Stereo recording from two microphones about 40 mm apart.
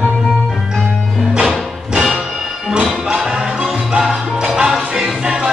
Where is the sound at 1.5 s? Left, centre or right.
Centre.